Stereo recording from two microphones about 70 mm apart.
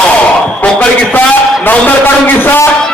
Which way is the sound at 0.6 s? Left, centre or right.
Left.